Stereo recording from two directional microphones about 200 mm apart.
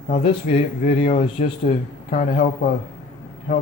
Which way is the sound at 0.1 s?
30° left (ahead or behind).